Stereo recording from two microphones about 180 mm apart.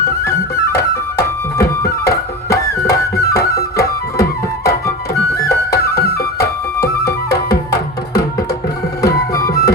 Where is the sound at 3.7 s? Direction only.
15° left (ahead or behind).